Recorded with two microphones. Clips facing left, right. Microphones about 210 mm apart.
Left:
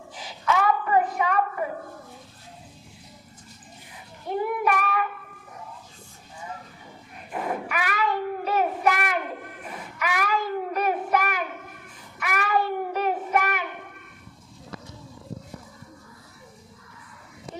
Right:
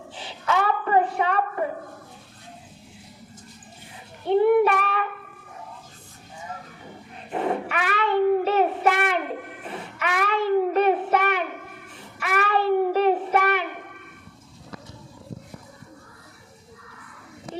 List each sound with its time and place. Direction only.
0.1 s a sound: 30° right (ahead or behind)
4.3 s child singing: 30° right (ahead or behind)
7.3 s child singing: 25° right (ahead or behind)